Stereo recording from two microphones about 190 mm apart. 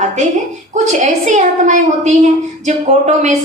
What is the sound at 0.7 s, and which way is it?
A woman's voice, 40° right (ahead or behind).